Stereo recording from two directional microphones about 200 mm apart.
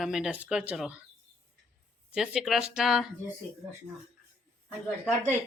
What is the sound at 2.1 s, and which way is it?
Speech, 5° right (ahead or behind).